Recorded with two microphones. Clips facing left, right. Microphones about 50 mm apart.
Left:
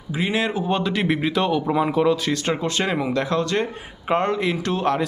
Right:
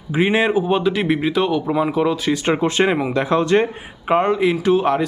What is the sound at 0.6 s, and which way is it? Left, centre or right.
Speech, centre.